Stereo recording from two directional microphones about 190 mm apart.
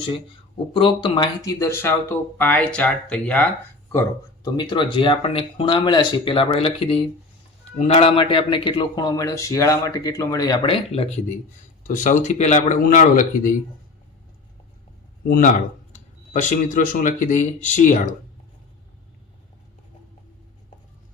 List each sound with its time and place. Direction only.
0.7 s speech: 25° left (ahead or behind); by 3.5 s 5° left (ahead or behind)
4.4 s a man's voice: 25° left (ahead or behind)
11.8 s speech: 45° left (ahead or behind)
15.3 s speech: 45° left (ahead or behind)